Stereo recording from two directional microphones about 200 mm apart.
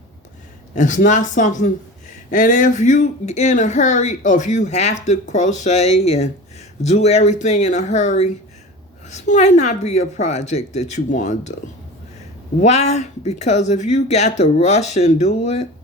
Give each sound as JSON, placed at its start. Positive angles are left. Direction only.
{"t": 0.8, "sound": "speech", "side_deg": 40}
{"t": 12.5, "sound": "speech", "side_deg": 35}